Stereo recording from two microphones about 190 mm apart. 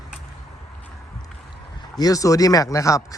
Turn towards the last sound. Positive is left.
turn(degrees=15)  # may be behind; listen again after turning